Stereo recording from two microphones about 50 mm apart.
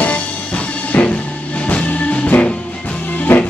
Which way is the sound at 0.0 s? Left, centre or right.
Left.